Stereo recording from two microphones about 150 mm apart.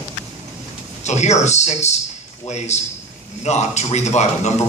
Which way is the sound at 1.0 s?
50° left (ahead or behind).